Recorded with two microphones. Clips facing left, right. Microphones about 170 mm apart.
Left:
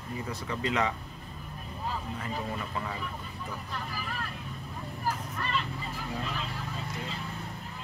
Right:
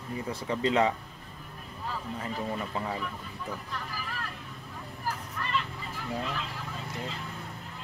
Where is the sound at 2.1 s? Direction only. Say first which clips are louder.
Right 2 dB; 30° right (ahead or behind).